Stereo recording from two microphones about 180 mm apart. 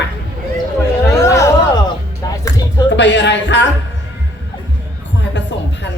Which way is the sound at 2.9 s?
80° left.